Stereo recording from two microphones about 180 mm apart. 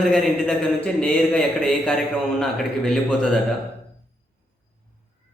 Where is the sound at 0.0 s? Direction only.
5° left (ahead or behind).